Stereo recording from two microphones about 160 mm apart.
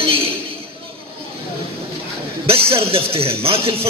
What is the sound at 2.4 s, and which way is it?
Speech, 35° right (ahead or behind).